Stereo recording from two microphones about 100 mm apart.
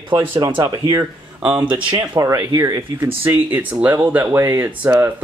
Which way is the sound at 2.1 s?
30° right (ahead or behind).